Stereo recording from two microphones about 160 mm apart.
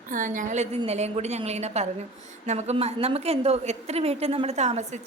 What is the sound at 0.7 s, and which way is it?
A woman's voice, 40° right (ahead or behind).